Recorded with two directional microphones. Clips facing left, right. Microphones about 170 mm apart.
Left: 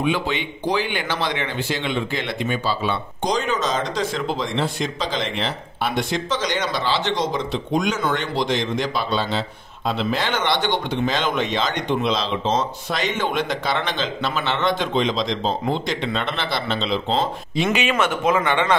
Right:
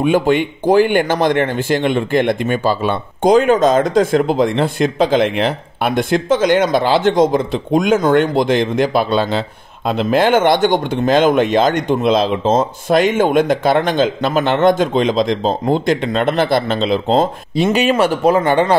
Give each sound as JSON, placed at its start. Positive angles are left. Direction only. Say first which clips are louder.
{"t": 0.0, "sound": "speech", "louder": "right 9 dB", "side_deg": -50}
{"t": 17.7, "sound": "speech", "louder": "right 7 dB", "side_deg": -35}